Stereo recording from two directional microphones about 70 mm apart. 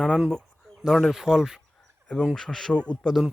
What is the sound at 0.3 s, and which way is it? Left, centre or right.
Bird, centre.